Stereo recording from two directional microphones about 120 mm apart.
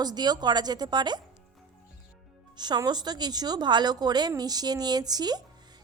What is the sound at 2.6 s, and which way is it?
A woman's voice, 35° right (ahead or behind).